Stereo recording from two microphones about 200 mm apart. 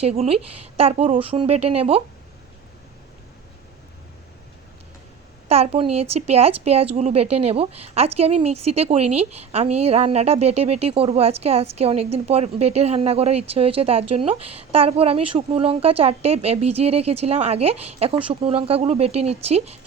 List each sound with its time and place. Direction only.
0.0 s speech: 30° right (ahead or behind)
5.5 s speech: 30° right (ahead or behind)